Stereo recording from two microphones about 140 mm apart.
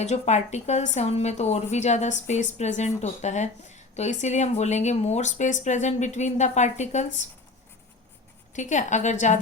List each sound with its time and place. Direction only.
0.0 s a woman's voice: 55° left (ahead or behind)
8.5 s a woman's voice: 60° left (ahead or behind)